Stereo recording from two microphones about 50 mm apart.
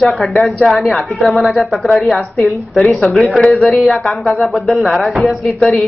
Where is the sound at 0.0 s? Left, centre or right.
Centre.